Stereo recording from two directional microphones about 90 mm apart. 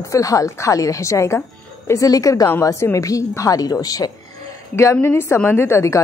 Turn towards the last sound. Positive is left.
turn(degrees=30)  # may be behind; listen again after turning